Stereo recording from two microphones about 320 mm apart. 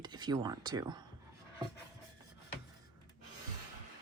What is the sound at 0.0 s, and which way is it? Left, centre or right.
Speech, centre.